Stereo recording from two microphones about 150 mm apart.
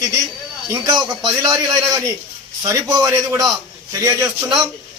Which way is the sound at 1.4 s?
25° right (ahead or behind).